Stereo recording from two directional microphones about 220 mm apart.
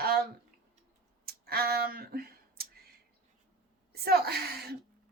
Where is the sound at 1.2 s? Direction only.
45° right (ahead or behind).